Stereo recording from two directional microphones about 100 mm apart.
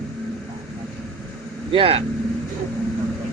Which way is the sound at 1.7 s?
70° right (ahead or behind).